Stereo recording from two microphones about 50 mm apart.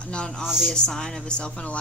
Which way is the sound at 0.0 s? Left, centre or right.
Centre.